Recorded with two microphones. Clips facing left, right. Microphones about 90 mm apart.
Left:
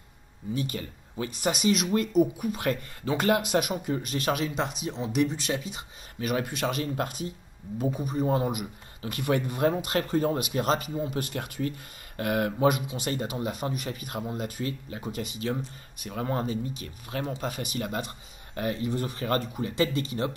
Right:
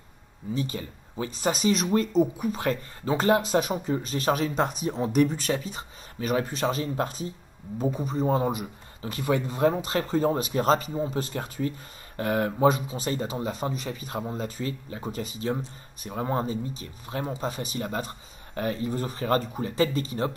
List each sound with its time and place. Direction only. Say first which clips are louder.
0.6 s speech: right 2 dB; 30° right (ahead or behind)